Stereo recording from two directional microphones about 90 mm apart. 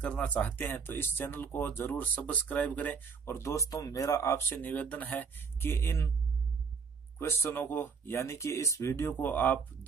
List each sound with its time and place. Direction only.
0.0 s speech: 15° left (ahead or behind); by 4.6 s 35° left (ahead or behind)
4.6 s speech: 20° left (ahead or behind)
7.2 s speech: 25° left (ahead or behind)
9.1 s speech: 20° left (ahead or behind)